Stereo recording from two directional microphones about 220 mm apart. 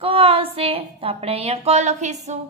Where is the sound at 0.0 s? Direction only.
25° right (ahead or behind).